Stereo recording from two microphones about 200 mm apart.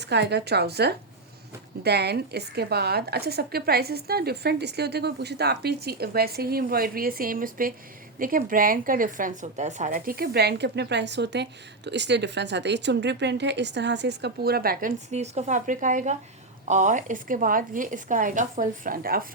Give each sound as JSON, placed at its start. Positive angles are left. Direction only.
{"t": 0.0, "sound": "a woman's voice", "side_deg": -55}